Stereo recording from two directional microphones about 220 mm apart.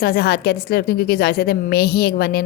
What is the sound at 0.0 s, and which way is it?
A woman's voice, 45° left (ahead or behind).